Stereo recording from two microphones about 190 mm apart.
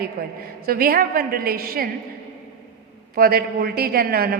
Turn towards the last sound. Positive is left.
turn(degrees=-55)  # may be behind; listen again after turning